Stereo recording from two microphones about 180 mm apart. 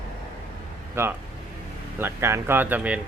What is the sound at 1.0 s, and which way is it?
Speech, 15° right (ahead or behind).